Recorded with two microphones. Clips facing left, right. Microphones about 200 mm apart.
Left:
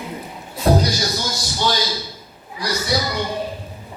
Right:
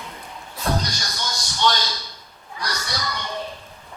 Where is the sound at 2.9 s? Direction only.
30° left (ahead or behind).